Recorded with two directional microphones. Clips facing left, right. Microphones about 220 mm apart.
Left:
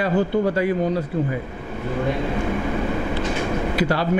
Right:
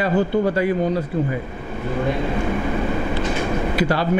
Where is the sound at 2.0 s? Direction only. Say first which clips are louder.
Right 1 dB; 20° right (ahead or behind).